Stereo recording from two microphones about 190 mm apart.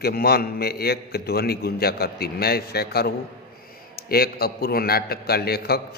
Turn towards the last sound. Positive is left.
turn(degrees=55)  # may be behind; listen again after turning